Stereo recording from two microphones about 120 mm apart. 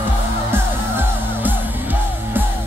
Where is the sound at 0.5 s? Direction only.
15° right (ahead or behind).